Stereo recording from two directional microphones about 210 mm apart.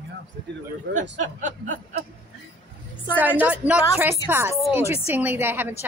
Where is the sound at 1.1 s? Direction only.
35° right (ahead or behind).